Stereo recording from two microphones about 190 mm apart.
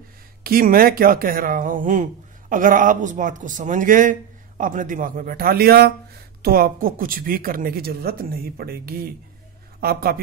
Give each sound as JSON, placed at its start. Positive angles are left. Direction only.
{"t": 0.4, "sound": "a man's voice", "side_deg": -50}